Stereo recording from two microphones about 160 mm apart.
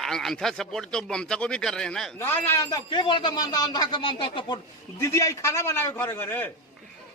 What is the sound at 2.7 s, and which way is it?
Speech, 30° left (ahead or behind).